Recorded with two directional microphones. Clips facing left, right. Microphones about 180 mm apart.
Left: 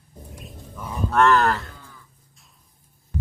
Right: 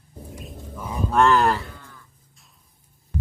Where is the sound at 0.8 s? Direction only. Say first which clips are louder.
Even; 10° right (ahead or behind).